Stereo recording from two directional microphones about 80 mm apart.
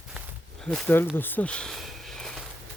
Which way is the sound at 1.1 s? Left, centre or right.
Left.